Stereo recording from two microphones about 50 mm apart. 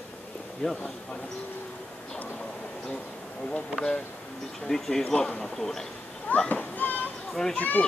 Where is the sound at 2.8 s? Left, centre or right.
Centre.